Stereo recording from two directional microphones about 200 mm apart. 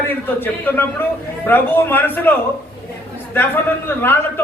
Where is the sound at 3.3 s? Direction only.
10° left (ahead or behind).